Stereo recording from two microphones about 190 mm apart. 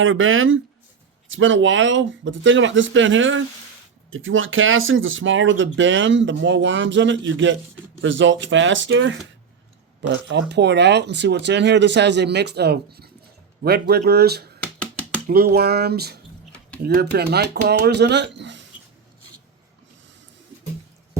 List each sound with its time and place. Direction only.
0.0 s speech: 90° right; by 14.5 s 55° right (ahead or behind)
14.8 s a sound: 5° left (ahead or behind)
15.3 s speech: 50° right (ahead or behind); by 18.6 s 70° right (ahead or behind)